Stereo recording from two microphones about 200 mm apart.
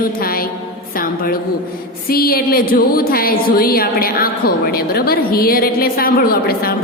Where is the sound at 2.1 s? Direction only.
50° left (ahead or behind).